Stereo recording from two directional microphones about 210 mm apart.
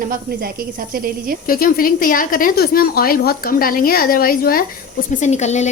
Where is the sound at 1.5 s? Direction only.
45° left (ahead or behind).